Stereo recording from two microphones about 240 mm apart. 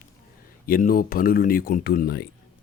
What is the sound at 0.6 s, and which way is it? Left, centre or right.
Speech, left.